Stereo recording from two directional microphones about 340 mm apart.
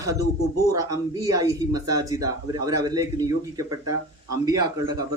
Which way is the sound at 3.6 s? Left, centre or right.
Right.